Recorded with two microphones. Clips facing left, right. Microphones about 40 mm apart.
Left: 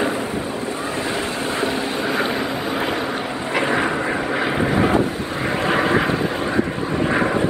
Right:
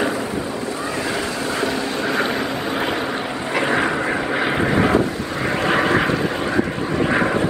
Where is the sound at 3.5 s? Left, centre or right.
Centre.